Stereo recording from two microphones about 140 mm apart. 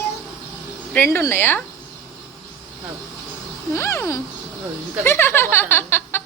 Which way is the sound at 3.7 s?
20° left (ahead or behind).